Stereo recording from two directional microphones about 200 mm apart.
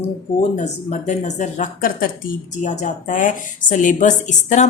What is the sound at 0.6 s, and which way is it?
Speech, 35° left (ahead or behind).